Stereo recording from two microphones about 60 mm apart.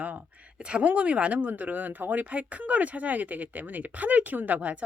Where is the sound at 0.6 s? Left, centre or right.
Right.